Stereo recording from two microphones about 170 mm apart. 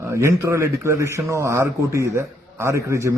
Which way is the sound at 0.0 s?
15° right (ahead or behind).